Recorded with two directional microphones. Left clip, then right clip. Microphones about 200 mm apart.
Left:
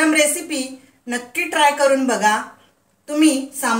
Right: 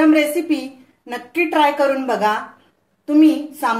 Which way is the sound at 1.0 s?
45° right (ahead or behind).